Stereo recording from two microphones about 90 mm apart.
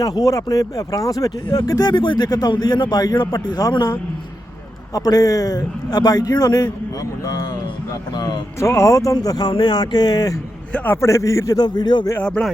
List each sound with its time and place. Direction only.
0.0 s speech: 40° left (ahead or behind)
4.9 s speech: 45° left (ahead or behind)
8.6 s speech: 35° left (ahead or behind)
10.9 s a man's voice: 35° left (ahead or behind)
11.6 s speech: 55° left (ahead or behind)
12.2 s speech: 10° left (ahead or behind)